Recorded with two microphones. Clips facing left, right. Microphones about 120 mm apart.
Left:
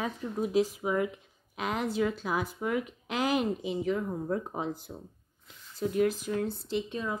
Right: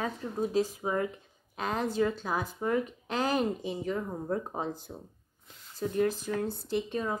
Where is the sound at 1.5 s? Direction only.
10° left (ahead or behind).